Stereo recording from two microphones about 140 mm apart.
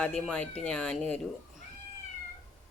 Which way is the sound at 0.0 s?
5° left (ahead or behind).